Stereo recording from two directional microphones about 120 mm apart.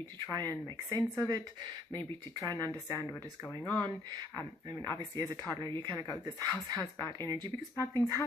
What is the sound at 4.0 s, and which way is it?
Speech, 35° right (ahead or behind).